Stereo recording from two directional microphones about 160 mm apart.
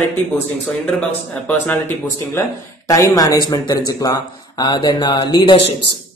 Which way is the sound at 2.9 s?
20° left (ahead or behind).